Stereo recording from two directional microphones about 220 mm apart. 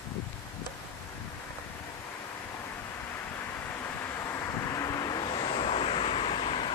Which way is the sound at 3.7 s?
10° left (ahead or behind).